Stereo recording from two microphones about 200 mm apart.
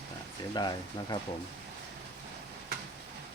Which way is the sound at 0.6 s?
20° left (ahead or behind).